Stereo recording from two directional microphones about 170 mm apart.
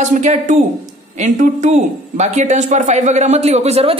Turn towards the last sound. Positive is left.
turn(degrees=-40)  # may be behind; listen again after turning